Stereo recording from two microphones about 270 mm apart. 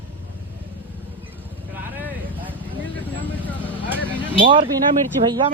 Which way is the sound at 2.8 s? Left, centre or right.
Centre.